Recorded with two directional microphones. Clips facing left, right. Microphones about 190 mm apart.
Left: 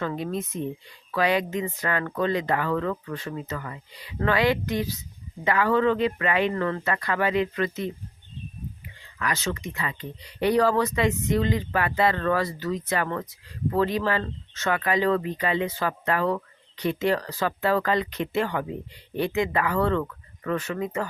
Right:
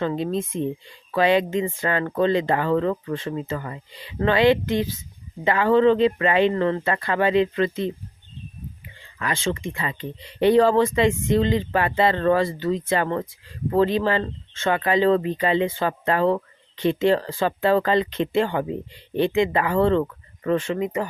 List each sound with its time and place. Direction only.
0.0 s speech: 25° right (ahead or behind)
9.1 s speech: 25° right (ahead or behind)